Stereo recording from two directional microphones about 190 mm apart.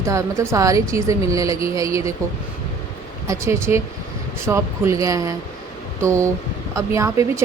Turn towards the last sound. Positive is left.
turn(degrees=-15)  # may be behind; listen again after turning